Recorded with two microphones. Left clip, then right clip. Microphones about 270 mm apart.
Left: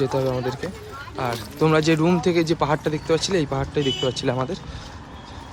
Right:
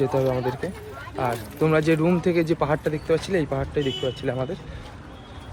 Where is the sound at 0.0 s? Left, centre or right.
Centre.